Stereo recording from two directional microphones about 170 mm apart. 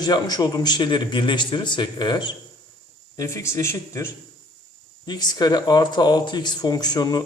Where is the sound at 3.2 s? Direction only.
15° left (ahead or behind).